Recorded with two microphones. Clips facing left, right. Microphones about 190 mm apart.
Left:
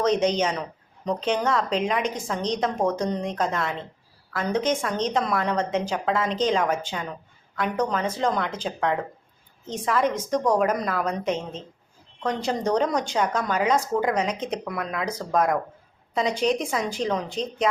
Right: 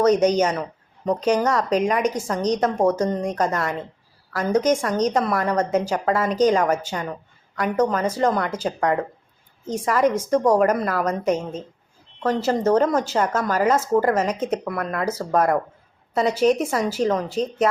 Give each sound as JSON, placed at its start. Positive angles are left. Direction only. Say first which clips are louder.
{"t": 0.0, "sound": "a woman's voice", "louder": "right 5 dB", "side_deg": -10}